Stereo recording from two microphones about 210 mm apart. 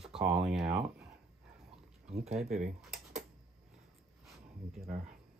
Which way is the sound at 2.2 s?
30° right (ahead or behind).